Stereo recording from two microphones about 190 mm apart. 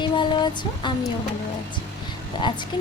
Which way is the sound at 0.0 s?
25° left (ahead or behind).